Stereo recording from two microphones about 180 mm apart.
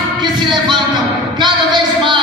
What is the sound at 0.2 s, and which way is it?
Music, 25° right (ahead or behind).